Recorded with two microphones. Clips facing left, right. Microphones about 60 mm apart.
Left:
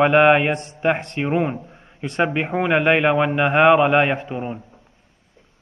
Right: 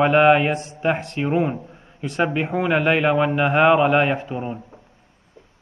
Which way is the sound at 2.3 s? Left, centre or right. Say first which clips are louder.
Even; left.